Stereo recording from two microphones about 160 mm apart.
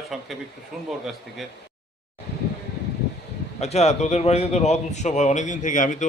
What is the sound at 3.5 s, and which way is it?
A man's voice, 40° left (ahead or behind).